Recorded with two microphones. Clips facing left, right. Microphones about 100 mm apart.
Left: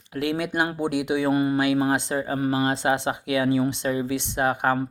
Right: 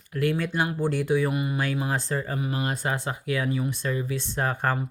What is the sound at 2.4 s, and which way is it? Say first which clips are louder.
Speech: left 6 dB; 40° left (ahead or behind).